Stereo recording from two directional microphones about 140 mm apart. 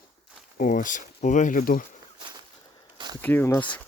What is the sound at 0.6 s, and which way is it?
Speech, 70° left (ahead or behind).